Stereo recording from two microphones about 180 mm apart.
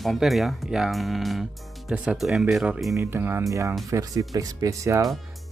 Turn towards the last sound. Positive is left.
turn(degrees=-15)  # may be behind; listen again after turning